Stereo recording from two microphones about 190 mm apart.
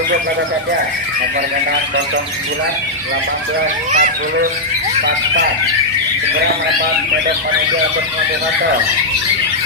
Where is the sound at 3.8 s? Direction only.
45° right (ahead or behind).